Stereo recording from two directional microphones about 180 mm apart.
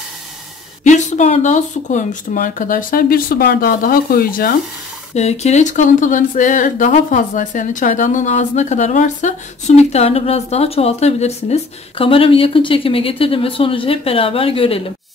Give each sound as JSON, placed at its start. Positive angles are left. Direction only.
{"t": 0.8, "sound": "speech", "side_deg": 40}
{"t": 5.1, "sound": "speech", "side_deg": 40}